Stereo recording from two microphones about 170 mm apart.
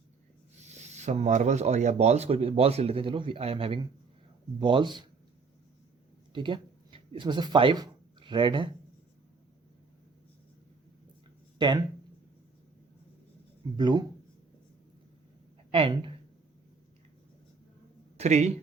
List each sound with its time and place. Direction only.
0.6 s speech: 40° right (ahead or behind); by 5.0 s 25° right (ahead or behind)
6.3 s speech: 30° right (ahead or behind)
11.5 s speech: 25° right (ahead or behind)
13.7 s speech: 25° right (ahead or behind)
15.7 s speech: 30° right (ahead or behind)
18.2 s speech: 40° right (ahead or behind)